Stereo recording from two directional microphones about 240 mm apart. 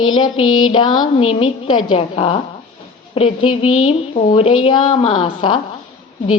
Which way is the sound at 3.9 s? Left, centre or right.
Left.